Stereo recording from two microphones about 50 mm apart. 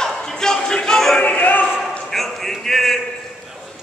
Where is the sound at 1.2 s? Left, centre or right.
Left.